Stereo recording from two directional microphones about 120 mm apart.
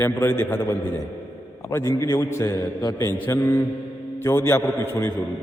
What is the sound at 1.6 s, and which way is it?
A man's voice, 25° left (ahead or behind).